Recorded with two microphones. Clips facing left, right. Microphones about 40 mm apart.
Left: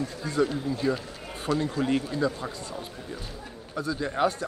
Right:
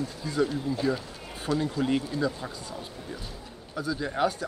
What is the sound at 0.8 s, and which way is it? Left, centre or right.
Speech, centre.